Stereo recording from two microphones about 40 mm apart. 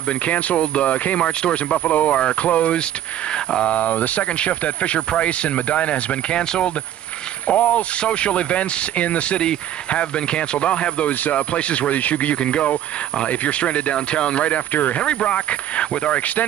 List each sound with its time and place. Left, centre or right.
0.2 s speech: left
1.9 s speech: left
7.4 s speech: left
15.0 s speech: left